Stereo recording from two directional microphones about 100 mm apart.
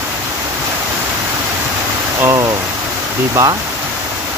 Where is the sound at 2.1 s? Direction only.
35° right (ahead or behind).